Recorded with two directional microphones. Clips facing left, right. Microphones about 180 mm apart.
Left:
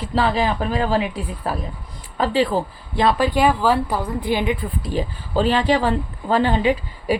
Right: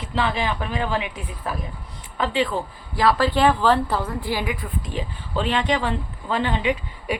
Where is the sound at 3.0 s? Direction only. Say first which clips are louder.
Left 1 dB; 20° left (ahead or behind); by 7.1 s 35° left (ahead or behind).